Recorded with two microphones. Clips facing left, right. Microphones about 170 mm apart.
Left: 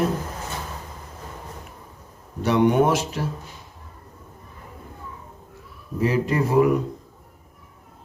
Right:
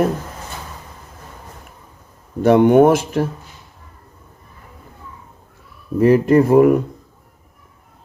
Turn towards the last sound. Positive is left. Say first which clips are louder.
# right 8 dB
turn(degrees=-55)  # may be behind; listen again after turning